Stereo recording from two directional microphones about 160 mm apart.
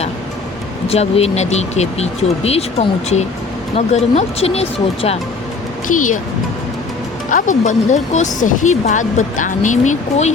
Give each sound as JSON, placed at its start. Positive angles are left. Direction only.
{"t": 0.9, "sound": "speech", "side_deg": 40}
{"t": 5.9, "sound": "speech", "side_deg": 55}
{"t": 7.3, "sound": "speech", "side_deg": 55}